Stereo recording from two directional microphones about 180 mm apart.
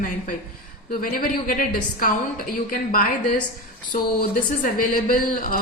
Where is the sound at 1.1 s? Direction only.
50° left (ahead or behind).